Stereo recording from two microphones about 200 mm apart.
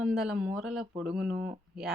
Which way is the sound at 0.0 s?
Centre (ahead or behind).